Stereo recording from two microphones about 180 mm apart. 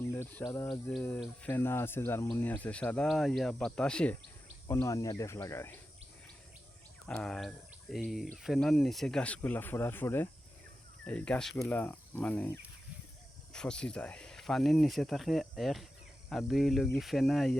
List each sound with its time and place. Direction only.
0.1 s speech: 15° left (ahead or behind)
4.7 s speech: 20° left (ahead or behind)
7.1 s speech: 5° left (ahead or behind)